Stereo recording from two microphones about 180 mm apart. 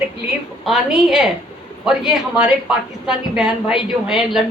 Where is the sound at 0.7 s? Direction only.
Centre (ahead or behind).